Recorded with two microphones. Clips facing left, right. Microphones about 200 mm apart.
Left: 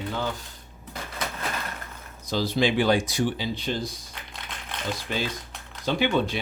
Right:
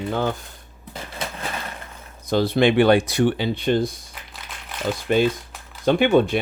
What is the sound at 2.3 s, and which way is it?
Speech, 60° right (ahead or behind).